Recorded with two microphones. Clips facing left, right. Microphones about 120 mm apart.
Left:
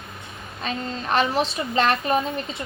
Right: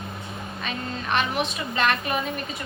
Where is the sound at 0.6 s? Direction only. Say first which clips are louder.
Left 3 dB; 35° left (ahead or behind).